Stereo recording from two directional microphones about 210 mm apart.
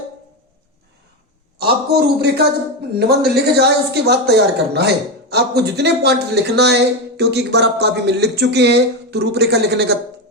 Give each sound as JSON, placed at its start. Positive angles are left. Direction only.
{"t": 1.5, "sound": "a man's voice", "side_deg": -50}